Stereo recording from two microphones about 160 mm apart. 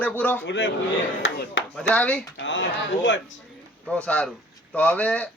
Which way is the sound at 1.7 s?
5° left (ahead or behind).